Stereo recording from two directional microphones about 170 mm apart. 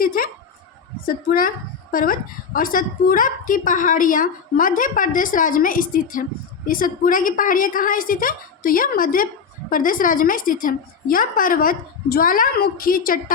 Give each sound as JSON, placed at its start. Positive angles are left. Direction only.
{"t": 0.0, "sound": "a woman's voice", "side_deg": 55}